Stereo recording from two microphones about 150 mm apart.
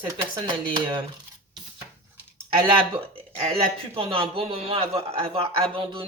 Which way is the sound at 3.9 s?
40° right (ahead or behind).